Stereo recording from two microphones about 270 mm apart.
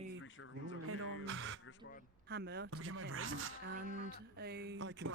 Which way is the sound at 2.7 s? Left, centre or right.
Right.